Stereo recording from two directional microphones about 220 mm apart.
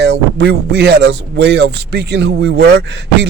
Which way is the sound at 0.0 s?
50° right (ahead or behind).